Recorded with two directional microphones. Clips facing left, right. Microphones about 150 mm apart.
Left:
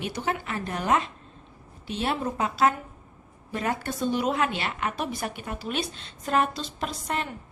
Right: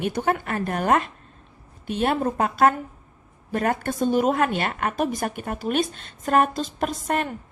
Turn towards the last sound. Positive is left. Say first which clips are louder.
# right 6 dB
turn(degrees=-50)  # may be behind; listen again after turning